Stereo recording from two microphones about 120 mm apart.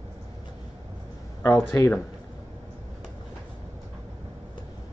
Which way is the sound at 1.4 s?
25° left (ahead or behind).